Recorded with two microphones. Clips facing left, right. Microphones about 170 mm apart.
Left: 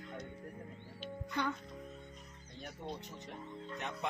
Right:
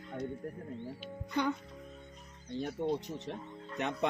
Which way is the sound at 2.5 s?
80° right.